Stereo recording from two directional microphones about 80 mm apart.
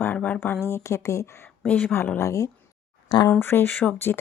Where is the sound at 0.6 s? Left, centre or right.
Left.